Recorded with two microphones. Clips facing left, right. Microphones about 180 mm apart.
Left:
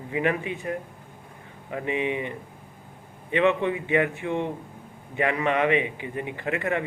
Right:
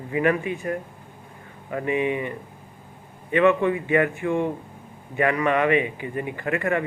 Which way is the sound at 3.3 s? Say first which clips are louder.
Right 3 dB; 20° left (ahead or behind).